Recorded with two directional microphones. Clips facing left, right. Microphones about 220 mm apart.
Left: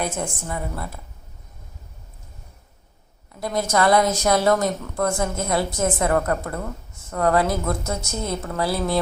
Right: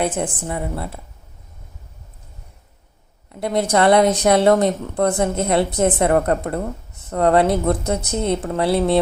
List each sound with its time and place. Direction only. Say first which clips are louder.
0.0 s speech: right 5 dB; 30° right (ahead or behind)
3.4 s speech: right 4 dB; 30° right (ahead or behind)